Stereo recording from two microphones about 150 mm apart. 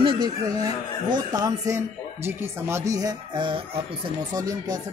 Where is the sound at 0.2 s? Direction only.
25° right (ahead or behind).